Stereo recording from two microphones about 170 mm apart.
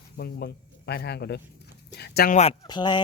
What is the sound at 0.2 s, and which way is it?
Speech, 70° left (ahead or behind).